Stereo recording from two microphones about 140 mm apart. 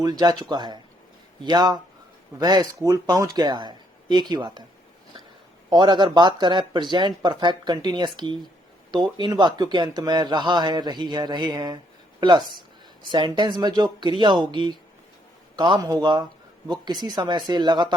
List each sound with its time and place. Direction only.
0.0 s a man's voice: 30° right (ahead or behind)
5.7 s a man's voice: 35° right (ahead or behind)
13.1 s a man's voice: 30° right (ahead or behind)